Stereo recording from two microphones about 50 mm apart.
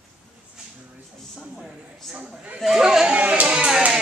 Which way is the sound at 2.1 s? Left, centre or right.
Centre.